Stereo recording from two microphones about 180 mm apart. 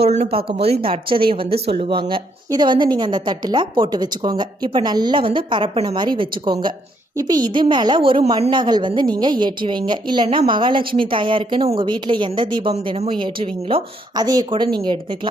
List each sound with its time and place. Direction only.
0.0 s a woman's voice: 35° right (ahead or behind)